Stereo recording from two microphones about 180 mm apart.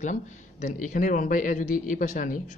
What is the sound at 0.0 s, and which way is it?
Speech, 45° left (ahead or behind).